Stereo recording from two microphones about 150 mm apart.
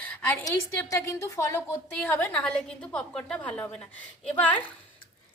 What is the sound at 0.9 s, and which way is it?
A woman's voice, 20° left (ahead or behind).